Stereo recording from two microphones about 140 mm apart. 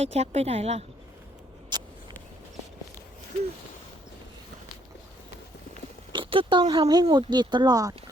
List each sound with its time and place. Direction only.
0.0 s speech: 50° right (ahead or behind)
1.7 s a sound: 30° right (ahead or behind)
6.1 s speech: 35° right (ahead or behind)